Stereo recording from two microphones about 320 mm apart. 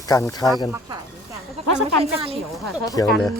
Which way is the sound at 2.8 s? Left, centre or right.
Centre.